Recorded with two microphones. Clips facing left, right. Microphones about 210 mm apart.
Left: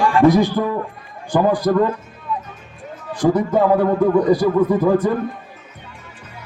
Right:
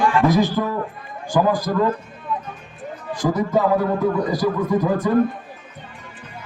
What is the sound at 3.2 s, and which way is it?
Speech, 45° left (ahead or behind).